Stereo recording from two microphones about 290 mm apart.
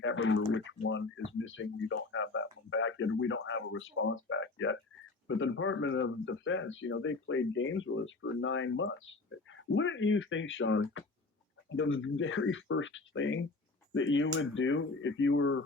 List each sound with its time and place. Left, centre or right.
0.0 s speech: left